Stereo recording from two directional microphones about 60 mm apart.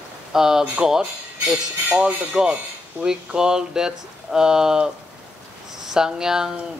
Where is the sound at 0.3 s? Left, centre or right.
Centre.